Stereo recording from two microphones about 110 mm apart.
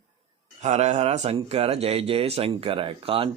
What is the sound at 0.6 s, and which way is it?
Speech, 90° right.